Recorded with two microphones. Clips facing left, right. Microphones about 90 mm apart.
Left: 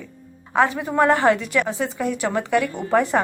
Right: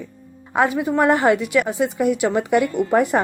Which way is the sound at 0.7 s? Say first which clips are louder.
Right 5 dB; centre (ahead or behind).